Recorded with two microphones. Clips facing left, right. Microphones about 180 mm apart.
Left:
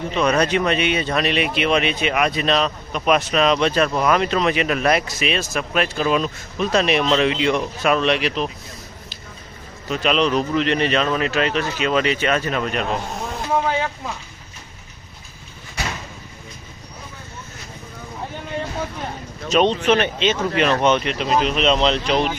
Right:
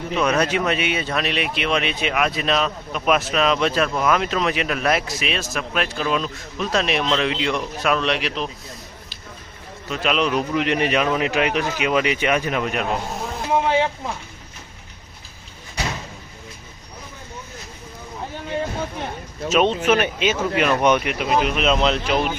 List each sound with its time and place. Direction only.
0.2 s speech: 5° right (ahead or behind)
9.9 s a man's voice: 5° right (ahead or behind)
13.5 s vehicle: 25° right (ahead or behind)
19.5 s a man's voice: 5° right (ahead or behind)